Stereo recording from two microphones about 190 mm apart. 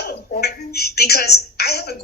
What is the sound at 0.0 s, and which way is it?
A woman's voice, 55° left (ahead or behind).